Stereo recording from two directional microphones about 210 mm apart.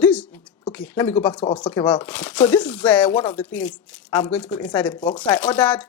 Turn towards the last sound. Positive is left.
turn(degrees=5)  # may be behind; listen again after turning